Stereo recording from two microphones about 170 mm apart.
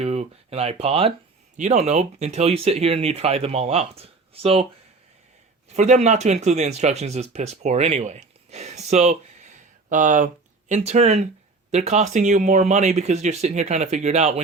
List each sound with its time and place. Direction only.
0.0 s speech: 40° right (ahead or behind)
5.7 s speech: 40° right (ahead or behind)